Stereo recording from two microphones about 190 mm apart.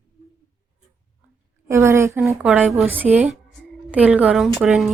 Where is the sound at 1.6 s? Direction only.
15° right (ahead or behind).